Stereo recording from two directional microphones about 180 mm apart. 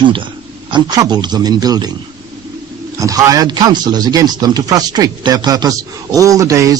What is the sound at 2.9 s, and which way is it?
Speech, 20° right (ahead or behind).